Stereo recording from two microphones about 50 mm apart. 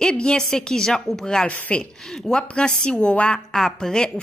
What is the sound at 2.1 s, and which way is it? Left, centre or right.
A woman's voice, centre.